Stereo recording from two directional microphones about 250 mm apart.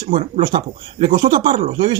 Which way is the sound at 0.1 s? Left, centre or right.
Right.